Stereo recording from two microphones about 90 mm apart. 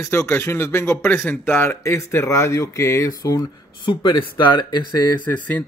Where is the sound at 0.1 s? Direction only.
30° left (ahead or behind).